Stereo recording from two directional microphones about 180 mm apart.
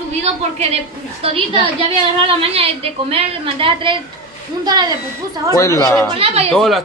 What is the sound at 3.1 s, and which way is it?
A woman's voice, 30° right (ahead or behind).